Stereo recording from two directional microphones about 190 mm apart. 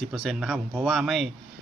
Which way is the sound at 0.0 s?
Centre (ahead or behind).